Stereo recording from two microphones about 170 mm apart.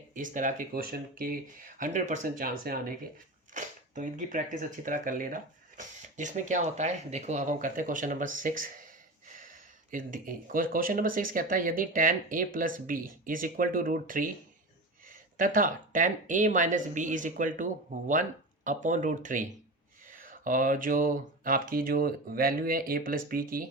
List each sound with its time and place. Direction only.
0.1 s speech: 50° right (ahead or behind)